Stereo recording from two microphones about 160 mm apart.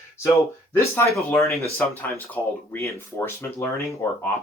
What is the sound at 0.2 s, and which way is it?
Speech, 20° left (ahead or behind).